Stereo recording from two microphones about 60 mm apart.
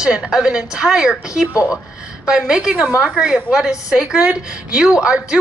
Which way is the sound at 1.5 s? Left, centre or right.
Left.